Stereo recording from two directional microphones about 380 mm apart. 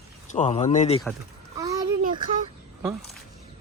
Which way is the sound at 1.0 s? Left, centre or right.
Centre.